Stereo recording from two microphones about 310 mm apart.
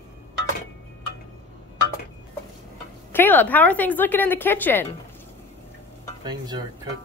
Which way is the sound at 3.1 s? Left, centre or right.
Centre.